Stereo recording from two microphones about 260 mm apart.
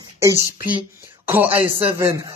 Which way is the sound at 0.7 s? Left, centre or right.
Centre.